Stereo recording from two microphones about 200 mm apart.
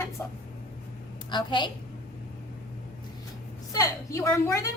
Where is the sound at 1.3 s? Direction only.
25° left (ahead or behind).